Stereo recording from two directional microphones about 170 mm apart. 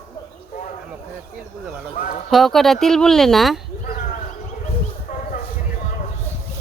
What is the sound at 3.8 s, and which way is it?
Bird, 55° left (ahead or behind).